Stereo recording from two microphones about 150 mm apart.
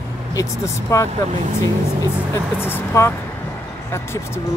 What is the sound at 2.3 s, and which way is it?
Speech, 15° left (ahead or behind).